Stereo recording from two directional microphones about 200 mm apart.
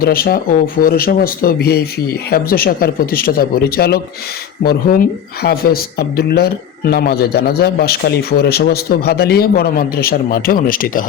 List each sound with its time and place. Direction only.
0.0 s speech: 50° left (ahead or behind)